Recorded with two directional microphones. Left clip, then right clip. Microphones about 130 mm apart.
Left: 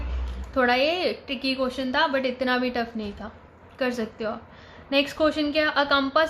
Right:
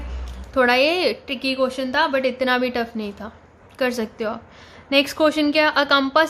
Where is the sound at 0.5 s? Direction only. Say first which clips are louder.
Right 5 dB; 45° right (ahead or behind).